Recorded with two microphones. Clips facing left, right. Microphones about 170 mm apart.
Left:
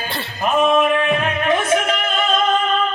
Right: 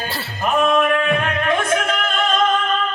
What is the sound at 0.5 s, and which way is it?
Music, 5° left (ahead or behind).